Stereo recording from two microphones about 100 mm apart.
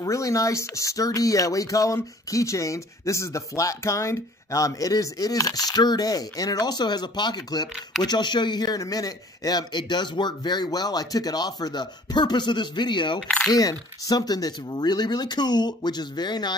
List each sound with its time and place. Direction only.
0.0 s a man's voice: 35° left (ahead or behind); by 13.2 s 50° left (ahead or behind)
13.5 s a man's voice: 40° left (ahead or behind)